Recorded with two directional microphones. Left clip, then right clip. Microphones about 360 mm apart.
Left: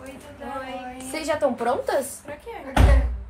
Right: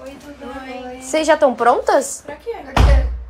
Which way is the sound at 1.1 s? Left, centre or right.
Right.